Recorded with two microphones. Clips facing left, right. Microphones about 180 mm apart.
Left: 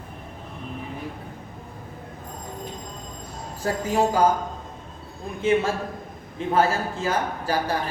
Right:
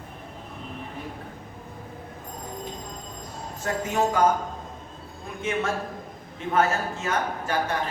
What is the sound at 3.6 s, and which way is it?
Speech, 35° left (ahead or behind).